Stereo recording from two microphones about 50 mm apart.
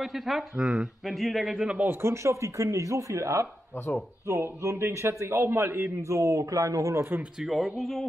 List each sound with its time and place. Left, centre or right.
0.0 s speech: centre
1.9 s a man's voice: right
7.3 s speech: centre